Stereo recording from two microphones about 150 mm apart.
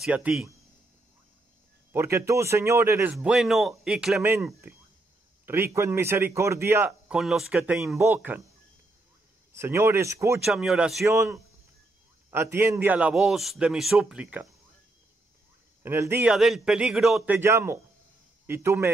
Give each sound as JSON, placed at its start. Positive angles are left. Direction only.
{"t": 0.0, "sound": "a man's voice", "side_deg": -5}
{"t": 1.9, "sound": "a man's voice", "side_deg": -15}
{"t": 4.2, "sound": "a man's voice", "side_deg": -15}
{"t": 9.5, "sound": "a man's voice", "side_deg": -15}
{"t": 10.4, "sound": "a man's voice", "side_deg": -5}
{"t": 11.1, "sound": "a man's voice", "side_deg": -20}
{"t": 15.8, "sound": "speech", "side_deg": -15}
{"t": 16.3, "sound": "a man's voice", "side_deg": 0}
{"t": 17.4, "sound": "a man's voice", "side_deg": -15}